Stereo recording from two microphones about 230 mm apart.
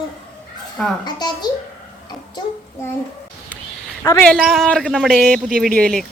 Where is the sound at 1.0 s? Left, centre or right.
Centre.